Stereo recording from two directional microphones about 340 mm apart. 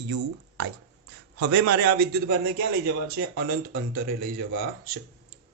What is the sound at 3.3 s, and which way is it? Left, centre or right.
Speech, right.